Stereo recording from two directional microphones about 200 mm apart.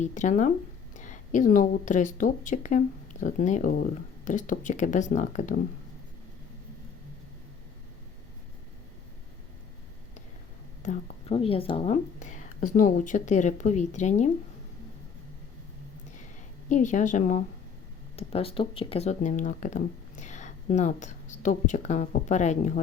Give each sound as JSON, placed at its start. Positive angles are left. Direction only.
{"t": 0.0, "sound": "speech", "side_deg": 35}
{"t": 10.8, "sound": "speech", "side_deg": 30}
{"t": 16.6, "sound": "speech", "side_deg": 40}